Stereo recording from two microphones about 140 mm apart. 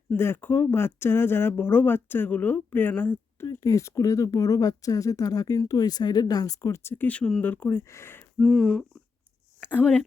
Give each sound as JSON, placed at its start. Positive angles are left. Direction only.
{"t": 0.1, "sound": "speech", "side_deg": 15}
{"t": 8.4, "sound": "humming", "side_deg": 0}
{"t": 9.7, "sound": "speech", "side_deg": 10}